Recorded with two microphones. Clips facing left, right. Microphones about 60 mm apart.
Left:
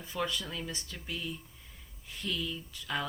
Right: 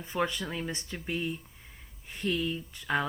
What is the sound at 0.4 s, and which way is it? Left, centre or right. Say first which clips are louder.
Speech: right 4 dB; right.